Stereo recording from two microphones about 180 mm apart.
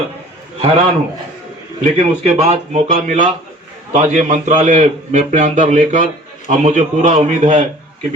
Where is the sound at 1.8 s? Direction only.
40° right (ahead or behind).